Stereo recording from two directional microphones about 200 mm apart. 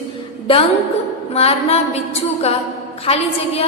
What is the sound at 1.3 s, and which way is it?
Music, 30° left (ahead or behind).